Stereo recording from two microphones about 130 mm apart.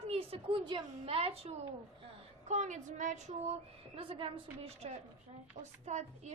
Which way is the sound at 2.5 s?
65° right (ahead or behind).